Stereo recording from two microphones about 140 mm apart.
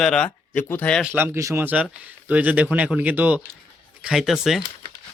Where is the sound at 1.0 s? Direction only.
15° right (ahead or behind).